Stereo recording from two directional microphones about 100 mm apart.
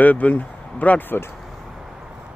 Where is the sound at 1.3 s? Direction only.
Centre (ahead or behind).